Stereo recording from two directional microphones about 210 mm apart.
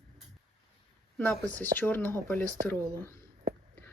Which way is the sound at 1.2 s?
5° left (ahead or behind).